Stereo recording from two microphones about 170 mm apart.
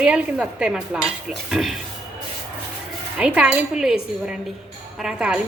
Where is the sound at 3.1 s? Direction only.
5° right (ahead or behind).